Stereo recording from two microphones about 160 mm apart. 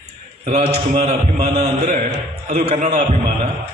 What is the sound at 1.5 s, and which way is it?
A man's voice, 40° right (ahead or behind).